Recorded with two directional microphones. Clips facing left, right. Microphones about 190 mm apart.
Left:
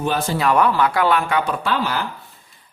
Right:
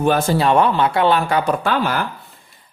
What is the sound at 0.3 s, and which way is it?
Speech, 25° right (ahead or behind).